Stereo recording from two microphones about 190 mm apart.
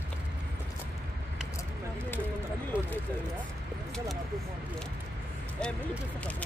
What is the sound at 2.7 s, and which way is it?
Speech, 5° right (ahead or behind).